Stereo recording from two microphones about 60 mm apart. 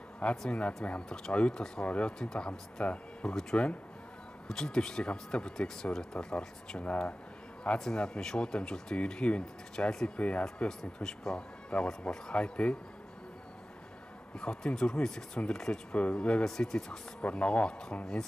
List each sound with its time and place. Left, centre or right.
0.4 s speech: centre
2.8 s speech: left
3.3 s speech: centre
14.4 s speech: centre